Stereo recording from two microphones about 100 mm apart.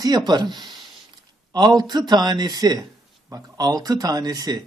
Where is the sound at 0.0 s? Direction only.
40° right (ahead or behind).